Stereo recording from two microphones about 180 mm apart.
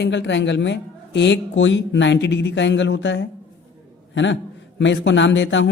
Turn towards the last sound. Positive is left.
turn(degrees=90)